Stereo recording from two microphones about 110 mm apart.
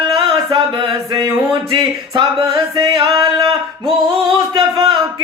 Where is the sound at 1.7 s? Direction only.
50° right (ahead or behind).